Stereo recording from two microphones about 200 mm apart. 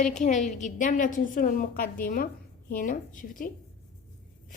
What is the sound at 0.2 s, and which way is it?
A woman's voice, 35° left (ahead or behind).